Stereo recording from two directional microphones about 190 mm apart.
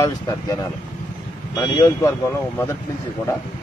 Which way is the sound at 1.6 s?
20° left (ahead or behind).